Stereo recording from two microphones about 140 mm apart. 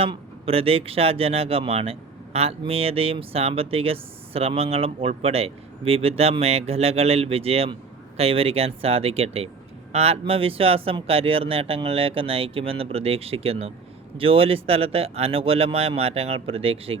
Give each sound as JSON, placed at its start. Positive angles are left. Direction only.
{"t": 0.0, "sound": "speech", "side_deg": -40}